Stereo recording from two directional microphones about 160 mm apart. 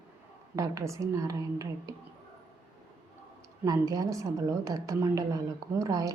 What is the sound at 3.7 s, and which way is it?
A woman's voice, 25° right (ahead or behind).